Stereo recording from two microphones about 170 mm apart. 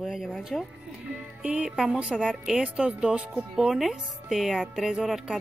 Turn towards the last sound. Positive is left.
turn(degrees=-5)  # may be behind; listen again after turning